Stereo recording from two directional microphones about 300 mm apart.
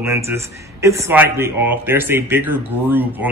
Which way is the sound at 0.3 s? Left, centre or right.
Centre.